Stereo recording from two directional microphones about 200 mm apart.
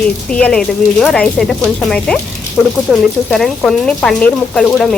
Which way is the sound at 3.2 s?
5° left (ahead or behind).